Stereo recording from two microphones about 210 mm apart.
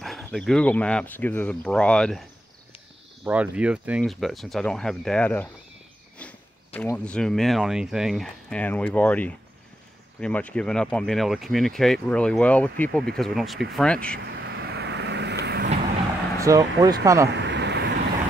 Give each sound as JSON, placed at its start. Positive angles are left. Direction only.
{"t": 0.0, "sound": "speech", "side_deg": 0}
{"t": 3.3, "sound": "speech", "side_deg": -5}
{"t": 6.8, "sound": "speech", "side_deg": 5}
{"t": 14.3, "sound": "vehicle", "side_deg": -50}
{"t": 16.3, "sound": "speech", "side_deg": -15}
{"t": 17.4, "sound": "vehicle", "side_deg": -55}